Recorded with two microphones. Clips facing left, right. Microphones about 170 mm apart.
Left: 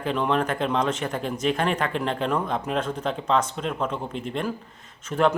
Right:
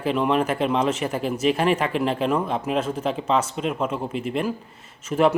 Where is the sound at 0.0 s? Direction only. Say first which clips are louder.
Right 3 dB; 5° right (ahead or behind).